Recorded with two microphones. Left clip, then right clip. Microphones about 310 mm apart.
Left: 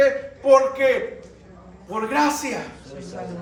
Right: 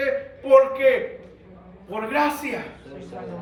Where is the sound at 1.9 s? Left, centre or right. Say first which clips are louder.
Left 2 dB; centre.